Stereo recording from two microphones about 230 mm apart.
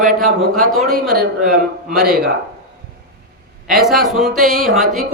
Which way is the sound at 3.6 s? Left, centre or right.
Centre.